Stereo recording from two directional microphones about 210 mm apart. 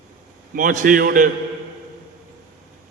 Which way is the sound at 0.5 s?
40° right (ahead or behind).